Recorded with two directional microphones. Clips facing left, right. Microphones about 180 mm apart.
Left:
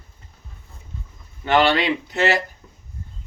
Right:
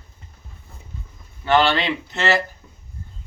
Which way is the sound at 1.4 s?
15° left (ahead or behind).